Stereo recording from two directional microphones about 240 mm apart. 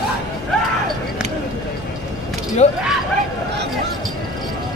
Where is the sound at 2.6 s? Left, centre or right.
Left.